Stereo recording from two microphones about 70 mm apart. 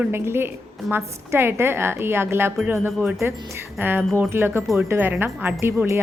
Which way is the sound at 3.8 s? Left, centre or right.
Right.